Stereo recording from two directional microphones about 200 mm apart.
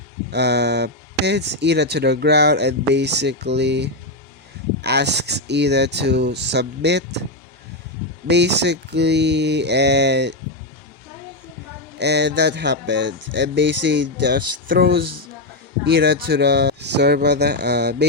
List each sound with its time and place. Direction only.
0.3 s speech: 55° right (ahead or behind)
8.3 s speech: 60° right (ahead or behind)
11.9 s speech: 55° right (ahead or behind)